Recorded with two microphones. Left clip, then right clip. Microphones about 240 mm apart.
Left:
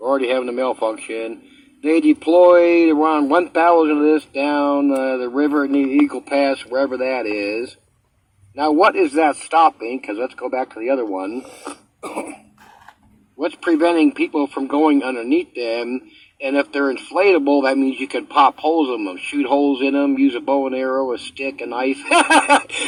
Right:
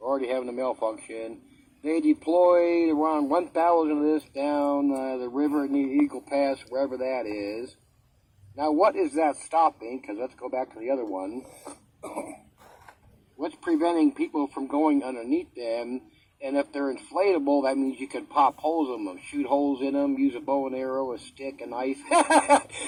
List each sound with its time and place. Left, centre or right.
0.0 s speech: left
13.4 s speech: left